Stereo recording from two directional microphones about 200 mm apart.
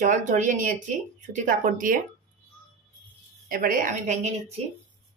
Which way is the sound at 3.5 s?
45° right (ahead or behind).